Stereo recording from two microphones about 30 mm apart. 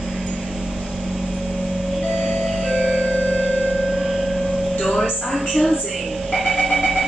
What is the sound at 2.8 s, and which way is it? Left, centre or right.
Music, left.